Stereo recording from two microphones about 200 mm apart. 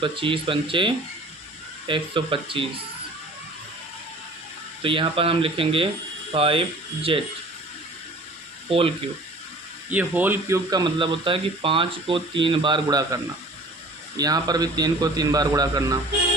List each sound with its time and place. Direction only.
0.0 s speech: 25° right (ahead or behind)
4.8 s speech: 25° right (ahead or behind)
9.9 s speech: 10° right (ahead or behind)
14.2 s speech: 20° right (ahead or behind)